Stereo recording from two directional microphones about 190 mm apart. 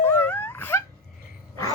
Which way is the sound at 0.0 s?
10° left (ahead or behind).